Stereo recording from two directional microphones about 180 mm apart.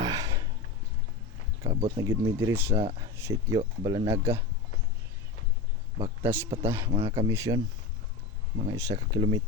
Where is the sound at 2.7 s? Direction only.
35° right (ahead or behind).